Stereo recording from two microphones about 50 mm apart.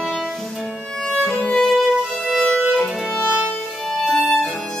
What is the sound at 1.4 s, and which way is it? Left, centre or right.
Violin, centre.